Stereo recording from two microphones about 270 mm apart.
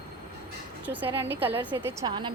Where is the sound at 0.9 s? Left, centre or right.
Centre.